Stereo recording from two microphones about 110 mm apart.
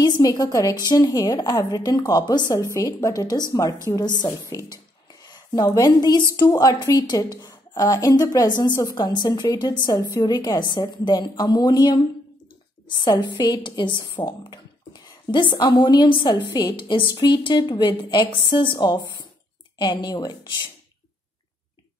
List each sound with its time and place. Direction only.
0.0 s a woman's voice: 35° left (ahead or behind)